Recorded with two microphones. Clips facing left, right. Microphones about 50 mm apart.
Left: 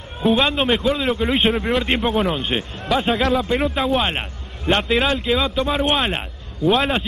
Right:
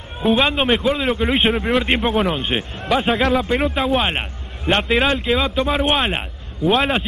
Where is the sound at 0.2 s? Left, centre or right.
Centre.